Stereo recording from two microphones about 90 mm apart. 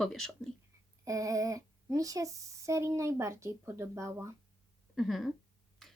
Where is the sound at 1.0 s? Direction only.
40° right (ahead or behind).